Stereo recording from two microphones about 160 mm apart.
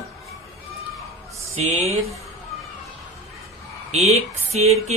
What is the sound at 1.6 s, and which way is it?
Speech, 45° right (ahead or behind).